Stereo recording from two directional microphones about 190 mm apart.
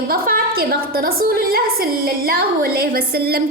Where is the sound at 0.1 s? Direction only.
50° right (ahead or behind).